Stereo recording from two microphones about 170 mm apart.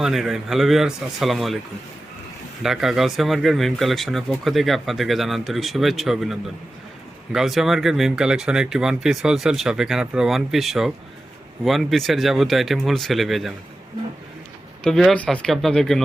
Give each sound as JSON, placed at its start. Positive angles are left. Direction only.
{"t": 0.0, "sound": "speech", "side_deg": 0}
{"t": 2.6, "sound": "speech", "side_deg": 0}
{"t": 14.8, "sound": "speech", "side_deg": 5}